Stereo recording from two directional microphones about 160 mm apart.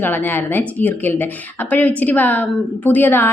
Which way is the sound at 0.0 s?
10° left (ahead or behind).